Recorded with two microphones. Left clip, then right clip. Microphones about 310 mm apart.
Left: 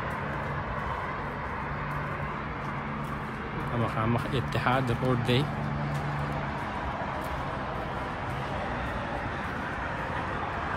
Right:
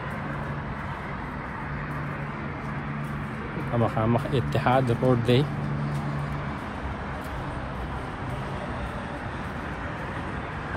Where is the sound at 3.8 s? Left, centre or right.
Centre.